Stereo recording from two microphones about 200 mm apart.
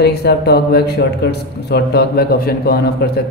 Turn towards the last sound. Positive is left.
turn(degrees=50)  # may be behind; listen again after turning